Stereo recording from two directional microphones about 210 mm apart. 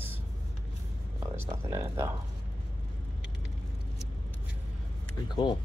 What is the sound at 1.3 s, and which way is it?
Speech, 10° right (ahead or behind).